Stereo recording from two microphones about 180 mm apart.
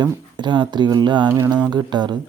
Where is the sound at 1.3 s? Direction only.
15° right (ahead or behind).